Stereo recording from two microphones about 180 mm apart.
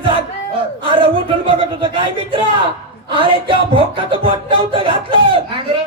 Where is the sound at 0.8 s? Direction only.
30° right (ahead or behind).